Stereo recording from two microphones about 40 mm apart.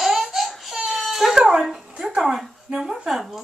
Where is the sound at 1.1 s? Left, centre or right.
Centre.